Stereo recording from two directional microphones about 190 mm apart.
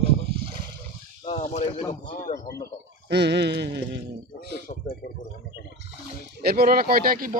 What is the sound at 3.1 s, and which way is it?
Speech, 60° right (ahead or behind).